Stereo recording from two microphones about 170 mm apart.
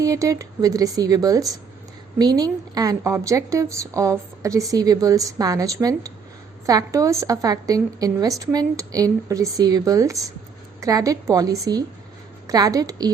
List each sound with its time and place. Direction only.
0.0 s a woman's voice: 20° right (ahead or behind)